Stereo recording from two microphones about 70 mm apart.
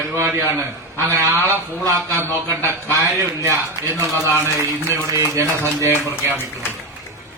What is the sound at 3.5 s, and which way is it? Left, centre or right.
Speech, left.